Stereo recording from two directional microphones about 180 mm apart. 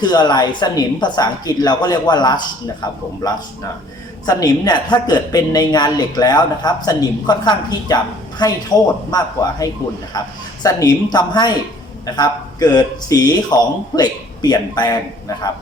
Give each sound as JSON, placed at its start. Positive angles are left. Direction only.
{"t": 0.0, "sound": "speech", "side_deg": 25}